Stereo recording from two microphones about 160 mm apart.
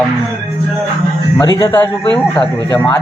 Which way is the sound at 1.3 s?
25° left (ahead or behind).